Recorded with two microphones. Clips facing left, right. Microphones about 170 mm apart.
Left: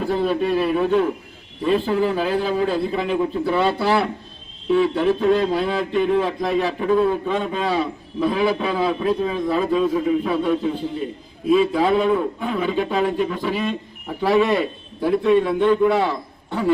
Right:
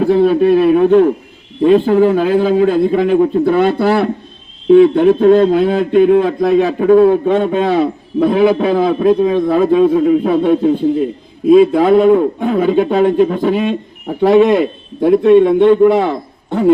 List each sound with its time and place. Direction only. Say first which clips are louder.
0.0 s a man's voice: right 10 dB; 60° right (ahead or behind); by 14.7 s 45° right (ahead or behind)
15.3 s speech: right 9 dB; 60° right (ahead or behind)
15.7 s a man's voice: right 8 dB; 45° right (ahead or behind)